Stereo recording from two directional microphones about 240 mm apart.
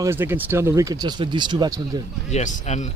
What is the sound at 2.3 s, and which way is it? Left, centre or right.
Speech, left.